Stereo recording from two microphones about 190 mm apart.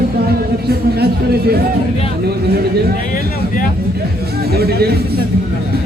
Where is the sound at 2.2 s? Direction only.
55° right (ahead or behind).